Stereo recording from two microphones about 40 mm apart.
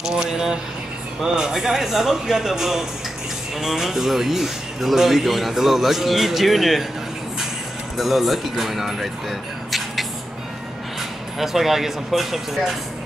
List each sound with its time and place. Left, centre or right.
0.0 s speech: centre
8.0 s speech: centre
9.7 s a sound: centre
11.0 s speech: centre